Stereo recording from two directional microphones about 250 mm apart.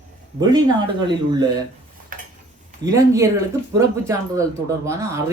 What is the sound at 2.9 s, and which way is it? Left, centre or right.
Speech, centre.